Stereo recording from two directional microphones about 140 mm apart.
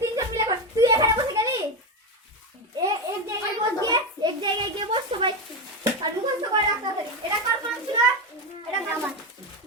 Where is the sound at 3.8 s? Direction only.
30° right (ahead or behind).